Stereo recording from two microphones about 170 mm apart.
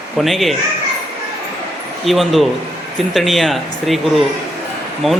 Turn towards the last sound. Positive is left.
turn(degrees=0)  # may be behind; listen again after turning